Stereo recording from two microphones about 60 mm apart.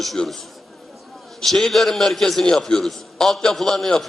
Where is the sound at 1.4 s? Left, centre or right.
Centre.